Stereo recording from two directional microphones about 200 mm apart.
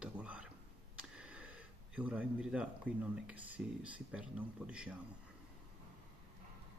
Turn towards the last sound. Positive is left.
turn(degrees=-5)  # may be behind; listen again after turning